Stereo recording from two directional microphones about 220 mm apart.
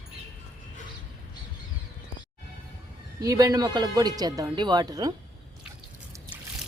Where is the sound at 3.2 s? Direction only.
15° right (ahead or behind).